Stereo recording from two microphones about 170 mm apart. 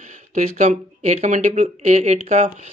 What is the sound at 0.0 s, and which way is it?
Speech, 45° right (ahead or behind).